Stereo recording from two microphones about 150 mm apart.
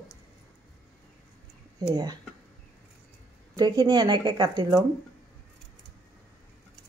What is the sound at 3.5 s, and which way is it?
Speech, 25° right (ahead or behind).